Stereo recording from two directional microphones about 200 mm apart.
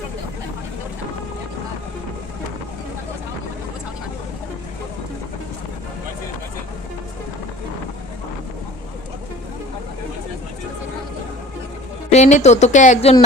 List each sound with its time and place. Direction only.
12.1 s speech: 35° left (ahead or behind)